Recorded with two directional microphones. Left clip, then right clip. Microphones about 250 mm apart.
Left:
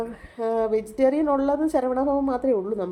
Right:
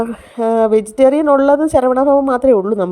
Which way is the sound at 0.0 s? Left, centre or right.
Right.